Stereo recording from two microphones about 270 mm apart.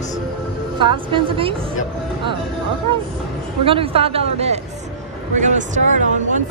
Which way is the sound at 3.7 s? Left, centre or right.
Right.